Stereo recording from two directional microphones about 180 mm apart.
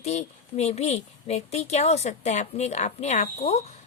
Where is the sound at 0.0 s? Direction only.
40° left (ahead or behind).